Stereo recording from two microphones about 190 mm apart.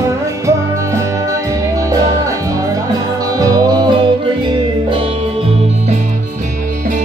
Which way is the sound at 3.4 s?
20° right (ahead or behind).